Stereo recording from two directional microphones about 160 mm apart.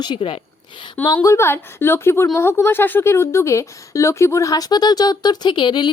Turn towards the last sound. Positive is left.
turn(degrees=30)  # may be behind; listen again after turning